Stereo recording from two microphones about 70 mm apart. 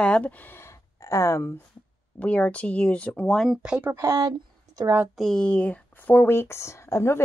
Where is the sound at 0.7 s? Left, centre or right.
Left.